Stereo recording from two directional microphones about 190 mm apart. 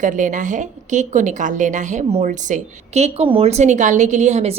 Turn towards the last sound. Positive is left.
turn(degrees=-35)  # may be behind; listen again after turning